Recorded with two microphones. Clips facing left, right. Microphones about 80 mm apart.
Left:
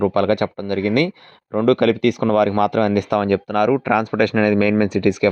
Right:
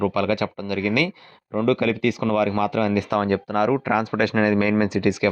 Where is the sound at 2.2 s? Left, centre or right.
Left.